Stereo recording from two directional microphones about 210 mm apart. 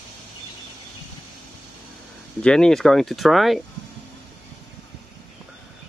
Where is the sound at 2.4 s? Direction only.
5° left (ahead or behind).